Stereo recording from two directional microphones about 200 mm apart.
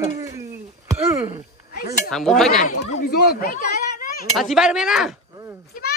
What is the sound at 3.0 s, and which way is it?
Speech, 50° left (ahead or behind).